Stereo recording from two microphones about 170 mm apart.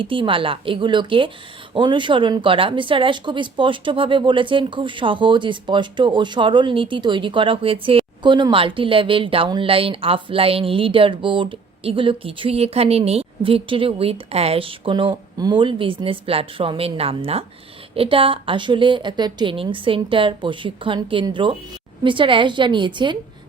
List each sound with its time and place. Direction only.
0.0 s a woman's voice: 30° right (ahead or behind)